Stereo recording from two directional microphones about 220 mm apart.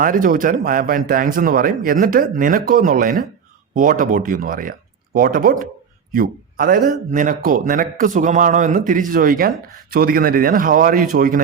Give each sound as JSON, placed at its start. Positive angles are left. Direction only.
{"t": 0.0, "sound": "a man's voice", "side_deg": -40}